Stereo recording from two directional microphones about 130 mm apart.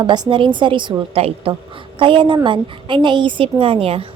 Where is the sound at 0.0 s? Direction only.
35° right (ahead or behind).